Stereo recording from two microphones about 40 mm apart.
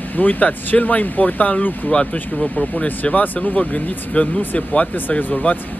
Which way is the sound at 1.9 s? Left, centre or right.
Left.